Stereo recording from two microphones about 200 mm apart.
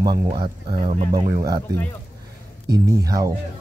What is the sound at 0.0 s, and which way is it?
Speech, 25° right (ahead or behind).